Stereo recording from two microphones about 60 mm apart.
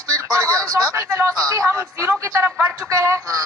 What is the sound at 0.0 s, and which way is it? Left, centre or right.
Speech, right.